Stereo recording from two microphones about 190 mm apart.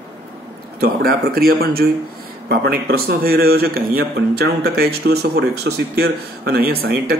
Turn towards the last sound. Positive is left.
turn(degrees=-55)  # may be behind; listen again after turning